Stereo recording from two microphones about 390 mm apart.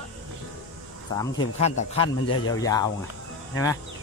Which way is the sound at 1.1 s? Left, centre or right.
Centre.